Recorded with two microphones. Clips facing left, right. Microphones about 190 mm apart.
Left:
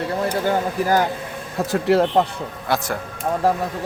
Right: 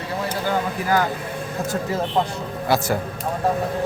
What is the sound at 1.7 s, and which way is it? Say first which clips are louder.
Speech: left 9 dB; 75° left (ahead or behind).